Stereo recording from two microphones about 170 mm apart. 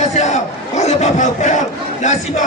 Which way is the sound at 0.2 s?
40° left (ahead or behind).